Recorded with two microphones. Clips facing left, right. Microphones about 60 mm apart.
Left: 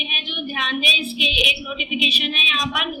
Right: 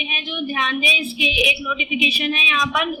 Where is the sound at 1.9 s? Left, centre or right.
Right.